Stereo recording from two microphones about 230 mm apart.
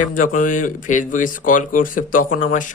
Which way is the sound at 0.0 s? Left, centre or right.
Left.